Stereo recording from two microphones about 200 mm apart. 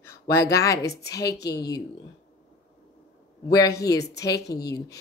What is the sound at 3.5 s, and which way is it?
Speech, 15° left (ahead or behind).